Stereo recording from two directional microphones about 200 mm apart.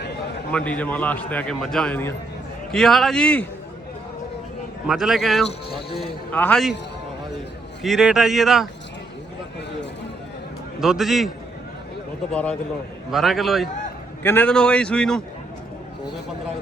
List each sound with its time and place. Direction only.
0.5 s a man's voice: 5° left (ahead or behind)
4.9 s a man's voice: centre (ahead or behind)
5.5 s speech: 30° left (ahead or behind)
6.0 s a man's voice: 5° left (ahead or behind)
7.8 s a man's voice: centre (ahead or behind)
10.8 s a man's voice: centre (ahead or behind)
12.3 s a man's voice: 5° left (ahead or behind)